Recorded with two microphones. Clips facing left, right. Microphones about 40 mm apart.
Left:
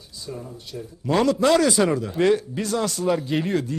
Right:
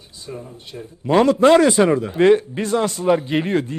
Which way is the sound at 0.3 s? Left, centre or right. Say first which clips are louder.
Right 1 dB; right.